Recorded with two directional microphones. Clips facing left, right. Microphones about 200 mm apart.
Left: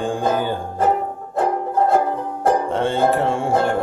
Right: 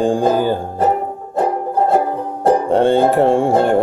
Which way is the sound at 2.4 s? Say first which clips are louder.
Right 6 dB; 35° right (ahead or behind).